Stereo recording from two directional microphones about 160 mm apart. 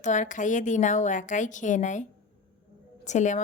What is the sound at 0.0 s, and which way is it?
A woman's voice, 50° left (ahead or behind).